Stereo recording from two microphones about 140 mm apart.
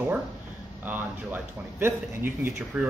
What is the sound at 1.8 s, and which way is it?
Speech, 15° right (ahead or behind).